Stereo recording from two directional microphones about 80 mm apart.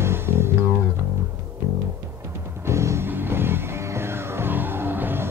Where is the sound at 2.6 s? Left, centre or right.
Right.